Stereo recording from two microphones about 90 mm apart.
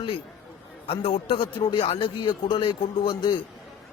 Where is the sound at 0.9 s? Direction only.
80° left.